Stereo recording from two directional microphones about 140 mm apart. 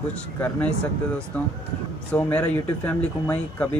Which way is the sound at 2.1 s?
10° left (ahead or behind).